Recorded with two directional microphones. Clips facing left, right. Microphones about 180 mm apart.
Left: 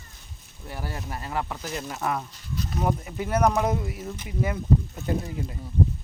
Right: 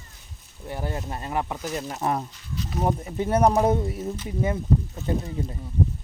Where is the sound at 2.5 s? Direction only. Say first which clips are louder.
Left 1 dB; 45° left (ahead or behind).